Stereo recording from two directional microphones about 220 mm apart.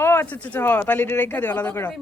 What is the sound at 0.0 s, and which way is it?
Speech, 10° left (ahead or behind).